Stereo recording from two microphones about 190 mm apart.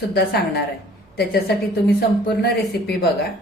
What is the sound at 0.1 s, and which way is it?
A woman's voice, 60° left (ahead or behind).